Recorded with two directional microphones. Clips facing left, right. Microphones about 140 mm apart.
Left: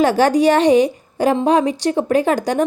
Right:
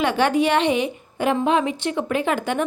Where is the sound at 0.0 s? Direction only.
40° left (ahead or behind).